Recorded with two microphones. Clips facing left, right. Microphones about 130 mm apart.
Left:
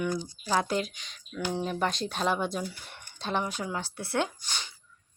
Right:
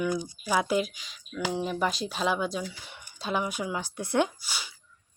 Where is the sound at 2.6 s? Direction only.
90° right.